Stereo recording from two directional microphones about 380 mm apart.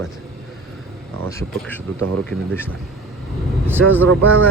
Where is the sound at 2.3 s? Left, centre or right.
Centre.